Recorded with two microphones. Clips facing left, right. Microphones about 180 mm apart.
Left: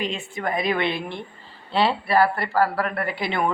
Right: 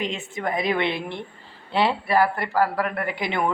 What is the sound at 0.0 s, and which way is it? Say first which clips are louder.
Speech: even; 20° right (ahead or behind).